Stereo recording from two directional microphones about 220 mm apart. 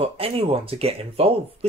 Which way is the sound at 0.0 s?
25° right (ahead or behind).